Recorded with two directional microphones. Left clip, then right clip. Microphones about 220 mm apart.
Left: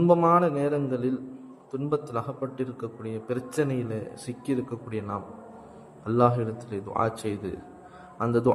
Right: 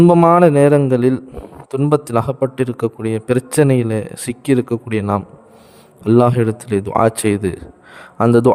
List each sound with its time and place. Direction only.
0.0 s a man's voice: 50° right (ahead or behind)